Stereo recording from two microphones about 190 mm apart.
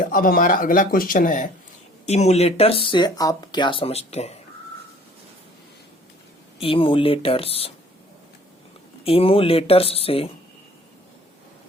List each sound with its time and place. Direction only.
0.0 s speech: 50° left (ahead or behind)
6.6 s speech: 30° left (ahead or behind)
9.0 s speech: 30° left (ahead or behind)